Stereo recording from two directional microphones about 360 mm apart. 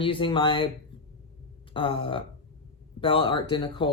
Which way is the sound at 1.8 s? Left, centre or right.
Centre.